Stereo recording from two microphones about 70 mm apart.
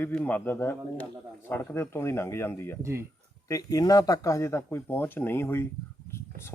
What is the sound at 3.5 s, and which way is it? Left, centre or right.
Speech, left.